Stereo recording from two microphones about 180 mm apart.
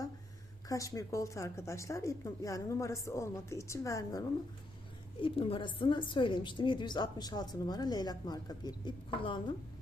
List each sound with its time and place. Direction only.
0.7 s a woman's voice: 20° left (ahead or behind)
5.2 s a woman's voice: 30° left (ahead or behind)